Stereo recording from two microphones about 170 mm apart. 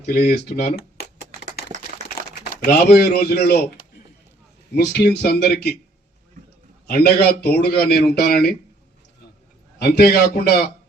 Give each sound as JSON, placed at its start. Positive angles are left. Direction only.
{"t": 0.0, "sound": "speech", "side_deg": 65}
{"t": 2.6, "sound": "speech", "side_deg": 65}
{"t": 4.7, "sound": "a man's voice", "side_deg": 70}
{"t": 6.8, "sound": "a man's voice", "side_deg": 70}
{"t": 9.7, "sound": "a man's voice", "side_deg": 70}